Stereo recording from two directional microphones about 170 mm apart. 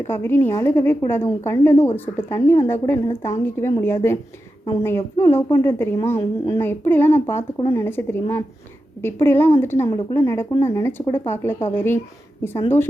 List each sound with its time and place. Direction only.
0.1 s a woman's voice: 15° left (ahead or behind)